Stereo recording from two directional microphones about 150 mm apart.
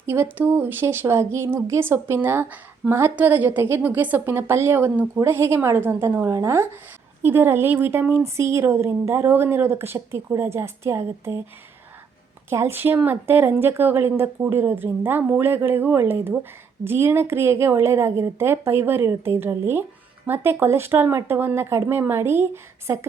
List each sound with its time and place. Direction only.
0.0 s a woman's voice: 15° right (ahead or behind)
12.5 s a woman's voice: 15° right (ahead or behind)